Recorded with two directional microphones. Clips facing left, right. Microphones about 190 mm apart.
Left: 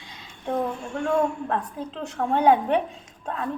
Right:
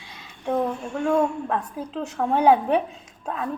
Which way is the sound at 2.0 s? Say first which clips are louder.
Right 2 dB; 10° right (ahead or behind).